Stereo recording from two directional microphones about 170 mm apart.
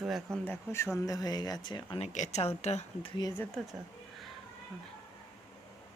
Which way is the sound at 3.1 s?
25° left (ahead or behind).